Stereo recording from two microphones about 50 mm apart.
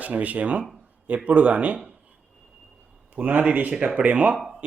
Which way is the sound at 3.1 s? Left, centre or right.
Right.